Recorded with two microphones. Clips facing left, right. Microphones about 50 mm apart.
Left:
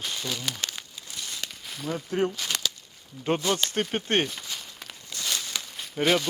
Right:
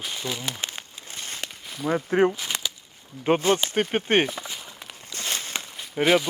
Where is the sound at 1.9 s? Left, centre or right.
Right.